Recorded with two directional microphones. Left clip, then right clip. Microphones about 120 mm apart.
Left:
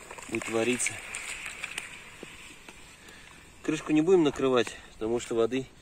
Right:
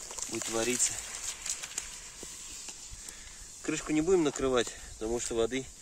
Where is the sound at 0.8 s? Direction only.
45° right (ahead or behind).